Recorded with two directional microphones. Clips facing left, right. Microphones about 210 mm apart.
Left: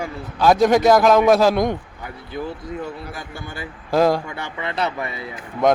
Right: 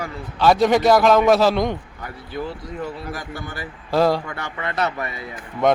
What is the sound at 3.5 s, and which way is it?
Speech, 25° left (ahead or behind).